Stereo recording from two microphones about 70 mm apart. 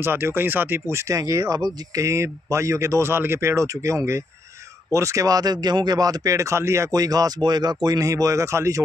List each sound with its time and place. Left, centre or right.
0.0 s speech: right
1.0 s speech: right
6.9 s speech: right
8.0 s speech: right